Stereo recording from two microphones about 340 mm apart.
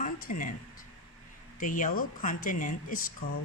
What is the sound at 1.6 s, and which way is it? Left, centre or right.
Speech, left.